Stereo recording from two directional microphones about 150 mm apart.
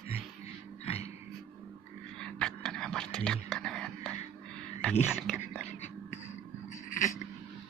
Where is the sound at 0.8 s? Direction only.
45° left (ahead or behind).